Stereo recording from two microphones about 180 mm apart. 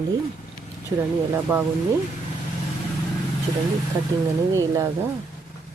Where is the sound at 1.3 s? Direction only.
10° right (ahead or behind).